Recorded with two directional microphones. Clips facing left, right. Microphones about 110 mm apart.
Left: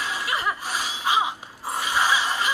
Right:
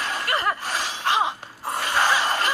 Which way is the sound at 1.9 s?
50° right (ahead or behind).